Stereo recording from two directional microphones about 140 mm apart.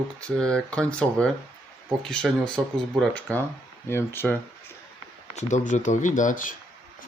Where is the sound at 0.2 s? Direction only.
5° left (ahead or behind).